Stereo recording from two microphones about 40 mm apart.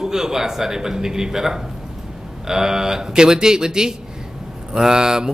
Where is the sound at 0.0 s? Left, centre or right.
Centre.